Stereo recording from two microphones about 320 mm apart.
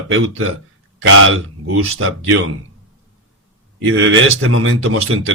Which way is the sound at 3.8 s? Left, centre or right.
Right.